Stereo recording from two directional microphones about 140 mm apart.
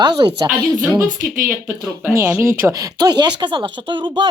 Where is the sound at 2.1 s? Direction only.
20° right (ahead or behind).